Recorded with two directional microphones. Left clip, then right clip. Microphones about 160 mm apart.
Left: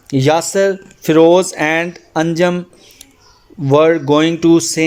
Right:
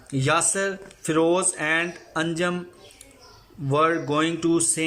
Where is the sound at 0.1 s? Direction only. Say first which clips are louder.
Left 9 dB; 35° left (ahead or behind).